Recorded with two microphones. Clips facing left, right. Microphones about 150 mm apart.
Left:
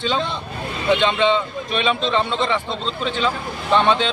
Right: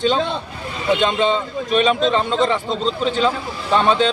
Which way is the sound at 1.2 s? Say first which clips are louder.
Even; 40° right (ahead or behind).